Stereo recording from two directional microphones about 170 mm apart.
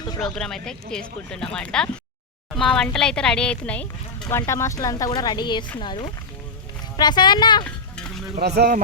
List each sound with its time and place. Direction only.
0.3 s speech: 5° left (ahead or behind); by 7.6 s 25° left (ahead or behind)
7.6 s stir: 5° left (ahead or behind)
8.4 s speech: 70° right (ahead or behind)